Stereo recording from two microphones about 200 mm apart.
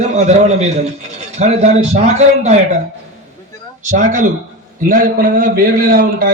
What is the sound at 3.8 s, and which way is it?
A man's voice, 40° right (ahead or behind).